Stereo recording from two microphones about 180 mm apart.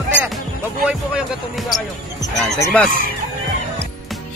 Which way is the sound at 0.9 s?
Centre (ahead or behind).